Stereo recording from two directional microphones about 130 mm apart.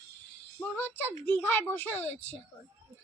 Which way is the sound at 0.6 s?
15° left (ahead or behind).